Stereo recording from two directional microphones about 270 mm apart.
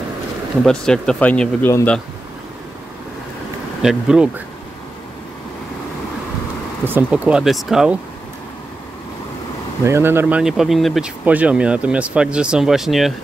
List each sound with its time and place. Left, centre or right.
0.7 s speech: centre
3.8 s speech: centre
6.8 s speech: centre
9.8 s speech: centre